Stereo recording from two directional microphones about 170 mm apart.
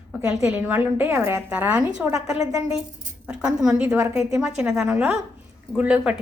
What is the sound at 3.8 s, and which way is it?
A woman's voice, 15° right (ahead or behind).